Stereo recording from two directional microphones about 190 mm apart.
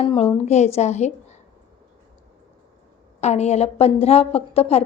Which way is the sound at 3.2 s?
35° left (ahead or behind).